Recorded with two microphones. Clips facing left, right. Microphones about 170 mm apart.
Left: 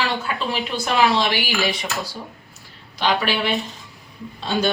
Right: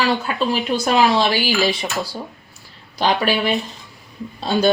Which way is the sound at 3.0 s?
40° right (ahead or behind).